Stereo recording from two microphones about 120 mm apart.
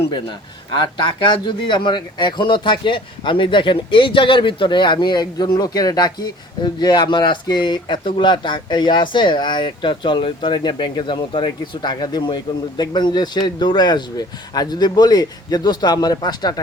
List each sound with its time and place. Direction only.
0.9 s speech: 40° left (ahead or behind)